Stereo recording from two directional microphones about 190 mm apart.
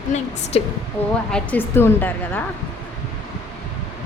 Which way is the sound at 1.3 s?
10° left (ahead or behind).